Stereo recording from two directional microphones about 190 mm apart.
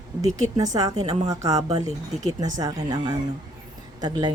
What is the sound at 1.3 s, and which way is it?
A woman's voice, 20° right (ahead or behind).